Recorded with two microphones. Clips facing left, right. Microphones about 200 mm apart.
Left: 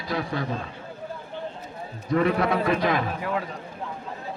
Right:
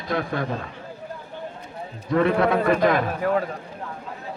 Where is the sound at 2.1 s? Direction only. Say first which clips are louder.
Right 3 dB; 50° right (ahead or behind).